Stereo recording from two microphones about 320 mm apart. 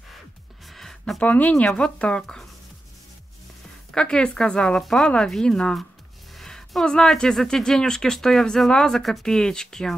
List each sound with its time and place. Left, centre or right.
0.7 s speech: centre
3.9 s speech: centre